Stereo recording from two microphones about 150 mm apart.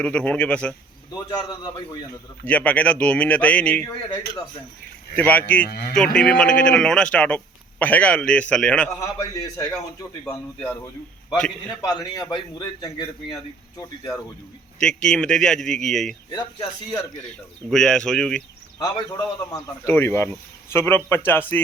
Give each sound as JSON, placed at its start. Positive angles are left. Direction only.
{"t": 0.0, "sound": "a man's voice", "side_deg": 10}
{"t": 1.3, "sound": "a man's voice", "side_deg": 25}
{"t": 2.5, "sound": "a man's voice", "side_deg": 10}
{"t": 5.1, "sound": "a man's voice", "side_deg": 10}
{"t": 5.6, "sound": "speech", "side_deg": 90}
{"t": 6.1, "sound": "a man's voice", "side_deg": 5}
{"t": 9.0, "sound": "a man's voice", "side_deg": 25}
{"t": 10.6, "sound": "a man's voice", "side_deg": 15}
{"t": 11.8, "sound": "a man's voice", "side_deg": 25}
{"t": 14.8, "sound": "a man's voice", "side_deg": 5}
{"t": 16.3, "sound": "a man's voice", "side_deg": 25}
{"t": 17.7, "sound": "a man's voice", "side_deg": 5}
{"t": 18.8, "sound": "a man's voice", "side_deg": 25}